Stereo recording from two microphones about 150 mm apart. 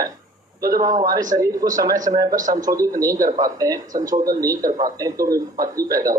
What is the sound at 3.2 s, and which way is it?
Speech, 60° right (ahead or behind).